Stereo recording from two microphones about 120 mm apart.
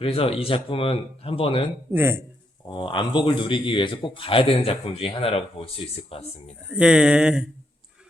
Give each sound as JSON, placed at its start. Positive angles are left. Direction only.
{"t": 0.0, "sound": "a man's voice", "side_deg": 50}
{"t": 1.9, "sound": "speech", "side_deg": -20}
{"t": 2.6, "sound": "a man's voice", "side_deg": 40}
{"t": 6.7, "sound": "speech", "side_deg": -10}